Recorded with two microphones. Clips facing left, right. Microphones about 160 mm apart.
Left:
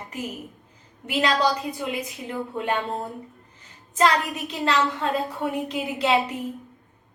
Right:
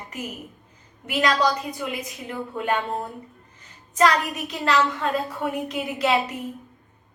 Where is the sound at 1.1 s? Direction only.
25° left (ahead or behind).